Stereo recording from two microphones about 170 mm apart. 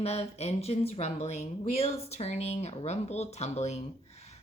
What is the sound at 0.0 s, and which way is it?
Speech, 40° left (ahead or behind).